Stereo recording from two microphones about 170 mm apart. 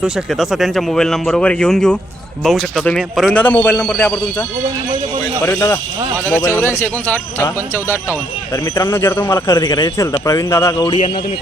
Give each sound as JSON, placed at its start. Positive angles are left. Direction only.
{"t": 0.0, "sound": "a man's voice", "side_deg": -5}
{"t": 5.5, "sound": "a man's voice", "side_deg": 15}
{"t": 10.8, "sound": "a man's voice", "side_deg": 30}